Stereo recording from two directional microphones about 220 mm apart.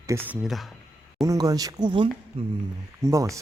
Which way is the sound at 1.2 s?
15° right (ahead or behind).